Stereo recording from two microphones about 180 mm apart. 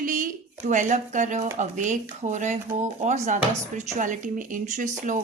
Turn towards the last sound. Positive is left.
turn(degrees=-45)  # may be behind; listen again after turning